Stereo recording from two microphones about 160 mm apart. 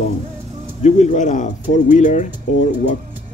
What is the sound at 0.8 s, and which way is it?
Speech, 45° left (ahead or behind).